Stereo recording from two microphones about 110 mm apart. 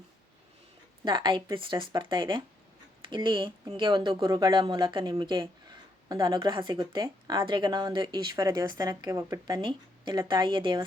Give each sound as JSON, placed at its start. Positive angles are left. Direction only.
{"t": 1.0, "sound": "speech", "side_deg": -45}
{"t": 4.2, "sound": "speech", "side_deg": -35}
{"t": 8.9, "sound": "speech", "side_deg": -30}
{"t": 9.5, "sound": "speech", "side_deg": -45}